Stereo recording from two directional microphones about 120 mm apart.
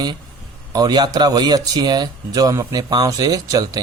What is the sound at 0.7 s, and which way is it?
Speech, 35° right (ahead or behind).